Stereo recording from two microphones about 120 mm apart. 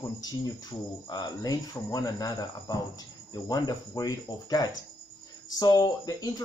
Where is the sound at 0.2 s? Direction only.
35° left (ahead or behind).